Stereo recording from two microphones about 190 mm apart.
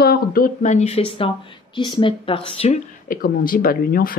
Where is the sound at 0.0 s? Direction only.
55° left (ahead or behind); by 2.8 s 30° left (ahead or behind).